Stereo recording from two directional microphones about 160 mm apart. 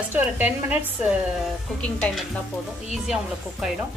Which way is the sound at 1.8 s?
5° left (ahead or behind).